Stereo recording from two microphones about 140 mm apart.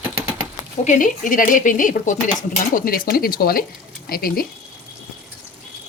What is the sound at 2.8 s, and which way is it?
Speech, 90° left.